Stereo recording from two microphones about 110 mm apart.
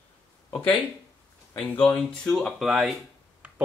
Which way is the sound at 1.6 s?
15° left (ahead or behind).